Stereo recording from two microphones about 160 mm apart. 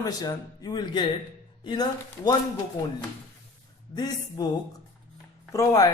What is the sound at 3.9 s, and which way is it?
Speech, 25° left (ahead or behind).